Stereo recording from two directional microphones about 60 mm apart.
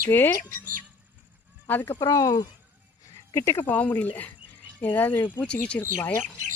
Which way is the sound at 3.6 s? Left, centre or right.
Left.